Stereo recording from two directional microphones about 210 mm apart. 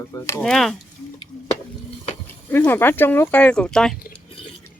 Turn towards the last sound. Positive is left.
turn(degrees=5)  # may be behind; listen again after turning